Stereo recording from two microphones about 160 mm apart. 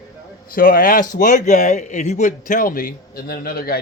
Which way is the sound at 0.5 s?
65° left (ahead or behind).